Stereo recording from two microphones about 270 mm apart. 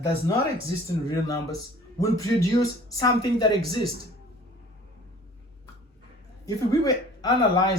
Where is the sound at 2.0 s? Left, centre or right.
Centre.